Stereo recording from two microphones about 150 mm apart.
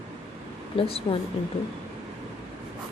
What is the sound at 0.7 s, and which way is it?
Speech, 40° left (ahead or behind).